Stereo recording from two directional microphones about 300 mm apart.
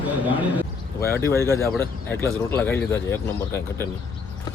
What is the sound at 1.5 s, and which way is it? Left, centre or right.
Speech, centre.